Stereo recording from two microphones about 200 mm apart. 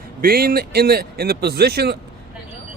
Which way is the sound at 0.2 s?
45° right (ahead or behind).